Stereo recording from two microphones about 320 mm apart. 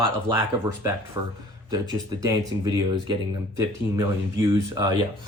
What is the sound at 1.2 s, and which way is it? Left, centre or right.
Speech, centre.